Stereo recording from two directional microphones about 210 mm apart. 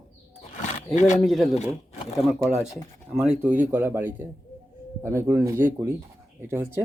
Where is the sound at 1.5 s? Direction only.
30° left (ahead or behind).